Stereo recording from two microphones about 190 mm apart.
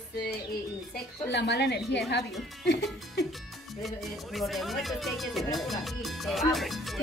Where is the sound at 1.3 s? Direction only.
65° left (ahead or behind).